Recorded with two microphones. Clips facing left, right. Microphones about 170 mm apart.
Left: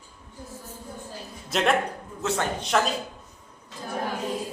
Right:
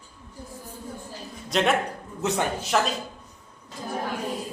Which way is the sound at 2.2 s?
20° right (ahead or behind).